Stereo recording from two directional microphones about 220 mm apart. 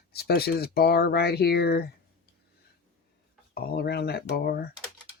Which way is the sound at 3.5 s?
45° left (ahead or behind).